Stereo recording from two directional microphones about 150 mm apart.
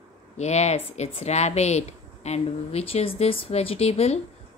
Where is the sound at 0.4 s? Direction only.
50° left (ahead or behind).